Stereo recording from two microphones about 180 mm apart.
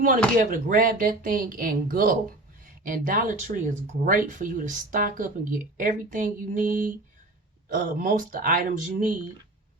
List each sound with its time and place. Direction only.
0.5 s speech: 50° right (ahead or behind)